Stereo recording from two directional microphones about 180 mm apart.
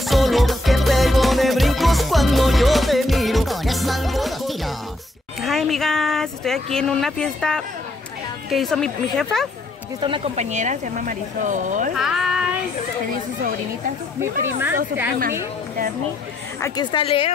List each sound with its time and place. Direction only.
0.0 s music: centre (ahead or behind)
5.4 s speech: centre (ahead or behind)
9.9 s speech: 30° right (ahead or behind); by 11.9 s 45° right (ahead or behind)
12.0 s a child's voice: centre (ahead or behind)
14.2 s speech: 10° right (ahead or behind)
16.6 s a woman's voice: 25° left (ahead or behind)